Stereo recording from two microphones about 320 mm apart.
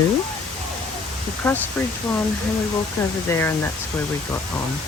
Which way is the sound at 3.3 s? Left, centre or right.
Centre.